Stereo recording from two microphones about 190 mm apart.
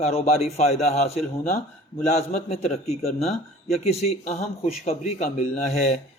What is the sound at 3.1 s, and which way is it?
A man's voice, 35° left (ahead or behind).